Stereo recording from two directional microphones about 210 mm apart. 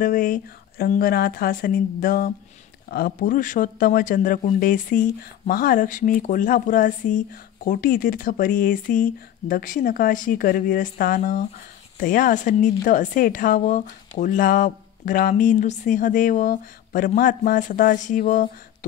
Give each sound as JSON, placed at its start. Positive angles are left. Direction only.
{"t": 0.0, "sound": "a woman's voice", "side_deg": 40}